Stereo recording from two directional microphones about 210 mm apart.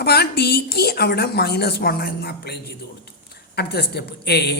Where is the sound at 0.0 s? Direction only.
50° left (ahead or behind).